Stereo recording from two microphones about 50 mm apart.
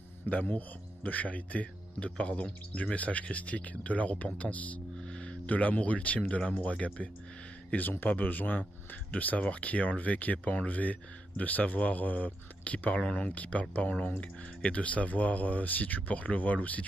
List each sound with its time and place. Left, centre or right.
0.3 s a man's voice: left
4.9 s speech: centre
7.9 s speech: left